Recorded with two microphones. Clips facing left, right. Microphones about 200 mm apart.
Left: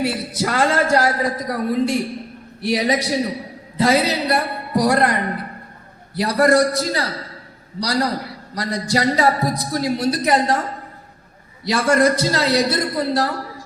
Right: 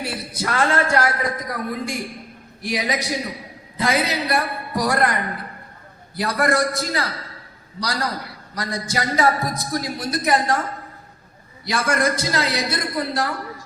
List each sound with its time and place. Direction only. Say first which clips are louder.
0.2 s a man's voice: left 6 dB; 90° left
0.5 s a man's voice: left 2 dB; 35° left (ahead or behind)
11.7 s a man's voice: left 5 dB; 35° left (ahead or behind)